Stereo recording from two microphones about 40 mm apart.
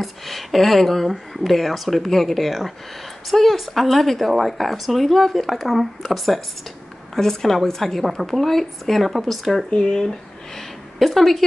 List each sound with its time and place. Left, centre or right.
0.0 s a woman's voice: centre
9.7 s speech: centre
11.0 s speech: centre